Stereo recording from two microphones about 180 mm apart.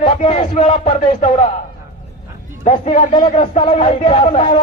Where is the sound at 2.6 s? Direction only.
35° left (ahead or behind).